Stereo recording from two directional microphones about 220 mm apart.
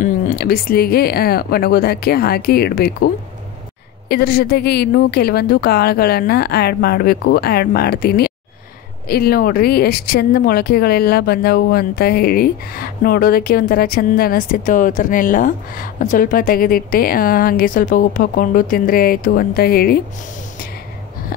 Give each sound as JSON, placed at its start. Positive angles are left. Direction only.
{"t": 0.0, "sound": "speech", "side_deg": 40}
{"t": 4.1, "sound": "speech", "side_deg": 45}